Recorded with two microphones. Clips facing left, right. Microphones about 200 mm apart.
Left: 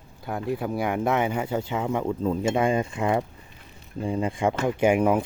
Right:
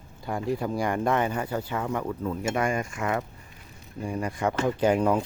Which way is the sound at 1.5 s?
20° left (ahead or behind).